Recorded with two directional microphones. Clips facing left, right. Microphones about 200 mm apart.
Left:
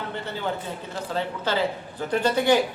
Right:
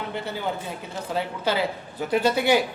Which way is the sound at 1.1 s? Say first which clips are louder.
Right 1 dB; 10° right (ahead or behind).